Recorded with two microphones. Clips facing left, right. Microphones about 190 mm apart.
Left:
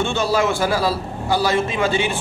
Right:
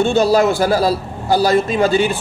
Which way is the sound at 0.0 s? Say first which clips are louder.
Right 6 dB; 40° right (ahead or behind).